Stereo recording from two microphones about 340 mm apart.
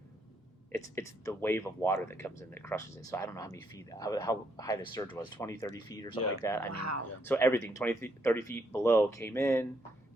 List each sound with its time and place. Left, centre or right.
0.7 s speech: centre
6.7 s speech: right
7.3 s speech: centre